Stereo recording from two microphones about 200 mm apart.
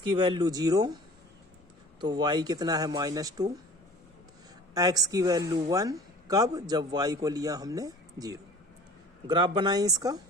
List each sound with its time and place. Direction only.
0.2 s speech: 25° right (ahead or behind)
2.0 s speech: 20° right (ahead or behind)
4.7 s speech: 20° right (ahead or behind)